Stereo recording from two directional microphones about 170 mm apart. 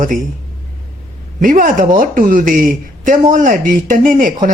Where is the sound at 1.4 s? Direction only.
50° right (ahead or behind).